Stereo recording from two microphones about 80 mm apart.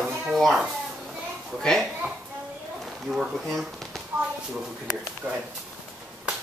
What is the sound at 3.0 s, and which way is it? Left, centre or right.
Speech, centre.